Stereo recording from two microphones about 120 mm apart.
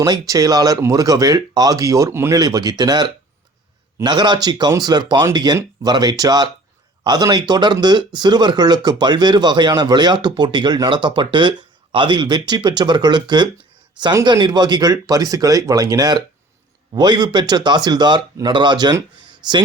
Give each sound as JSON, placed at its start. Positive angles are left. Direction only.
{"t": 0.0, "sound": "speech", "side_deg": -30}